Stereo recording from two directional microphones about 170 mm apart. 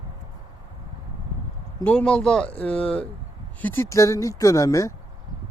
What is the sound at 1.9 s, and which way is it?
Speech, 5° left (ahead or behind).